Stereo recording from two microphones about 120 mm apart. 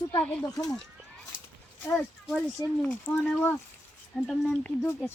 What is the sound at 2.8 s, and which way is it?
Speech, 10° left (ahead or behind).